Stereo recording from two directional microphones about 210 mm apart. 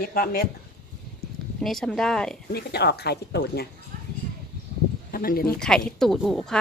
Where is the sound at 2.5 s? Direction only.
50° left (ahead or behind).